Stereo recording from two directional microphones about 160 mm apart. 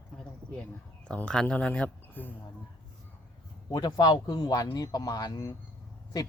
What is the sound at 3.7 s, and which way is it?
Speech, 25° left (ahead or behind).